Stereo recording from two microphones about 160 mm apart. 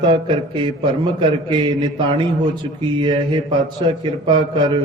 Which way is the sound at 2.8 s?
30° right (ahead or behind).